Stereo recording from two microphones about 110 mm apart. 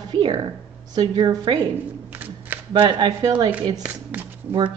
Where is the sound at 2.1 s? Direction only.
15° right (ahead or behind).